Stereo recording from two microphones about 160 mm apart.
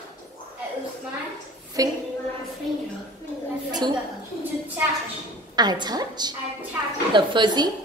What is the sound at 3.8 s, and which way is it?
Speech, 25° right (ahead or behind).